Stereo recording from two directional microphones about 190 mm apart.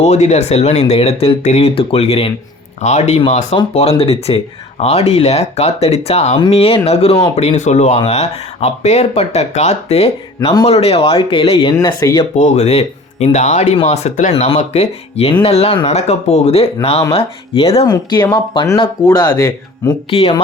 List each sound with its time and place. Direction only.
0.0 s speech: 35° left (ahead or behind)
12.4 s speech: 35° left (ahead or behind); by 19.9 s 20° left (ahead or behind)
20.1 s speech: 30° left (ahead or behind)